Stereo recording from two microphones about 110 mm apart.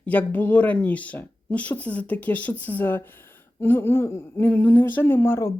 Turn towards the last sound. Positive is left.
turn(degrees=25)  # may be behind; listen again after turning